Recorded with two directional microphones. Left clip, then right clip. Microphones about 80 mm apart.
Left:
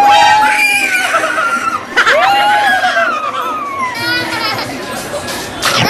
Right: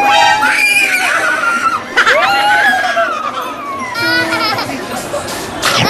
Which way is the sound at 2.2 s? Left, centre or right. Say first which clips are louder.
Left 1 dB; right.